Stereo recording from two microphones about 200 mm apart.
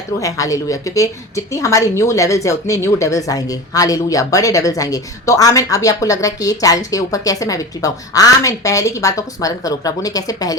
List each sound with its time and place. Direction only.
0.2 s a woman's voice: 15° left (ahead or behind)